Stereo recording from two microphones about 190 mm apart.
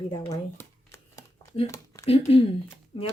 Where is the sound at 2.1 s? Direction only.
30° left (ahead or behind).